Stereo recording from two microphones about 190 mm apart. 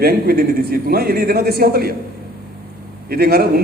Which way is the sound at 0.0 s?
55° right (ahead or behind).